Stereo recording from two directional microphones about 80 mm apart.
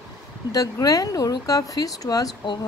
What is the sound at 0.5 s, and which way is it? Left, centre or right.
Speech, left.